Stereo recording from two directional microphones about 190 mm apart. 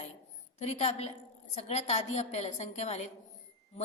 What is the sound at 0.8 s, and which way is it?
A woman's voice, 35° left (ahead or behind).